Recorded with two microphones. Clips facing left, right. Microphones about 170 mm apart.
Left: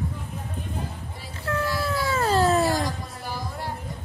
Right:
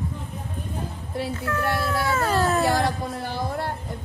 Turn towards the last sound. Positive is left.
turn(degrees=-65)  # may be behind; listen again after turning